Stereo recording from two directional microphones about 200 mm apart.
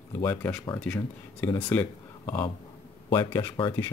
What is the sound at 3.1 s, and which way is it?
Speech, 15° left (ahead or behind).